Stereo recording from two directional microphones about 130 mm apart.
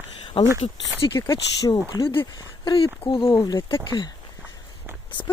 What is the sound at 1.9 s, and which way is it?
Speech, 35° left (ahead or behind).